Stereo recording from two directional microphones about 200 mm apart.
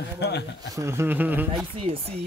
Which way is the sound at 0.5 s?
15° right (ahead or behind).